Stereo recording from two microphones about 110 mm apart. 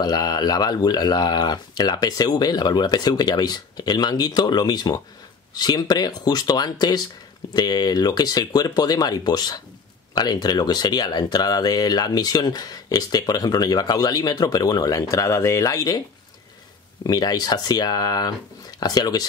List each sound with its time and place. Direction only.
0.0 s speech: 35° left (ahead or behind)
17.0 s speech: 35° left (ahead or behind)